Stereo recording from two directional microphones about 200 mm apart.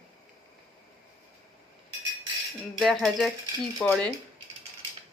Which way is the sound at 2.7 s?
Centre (ahead or behind).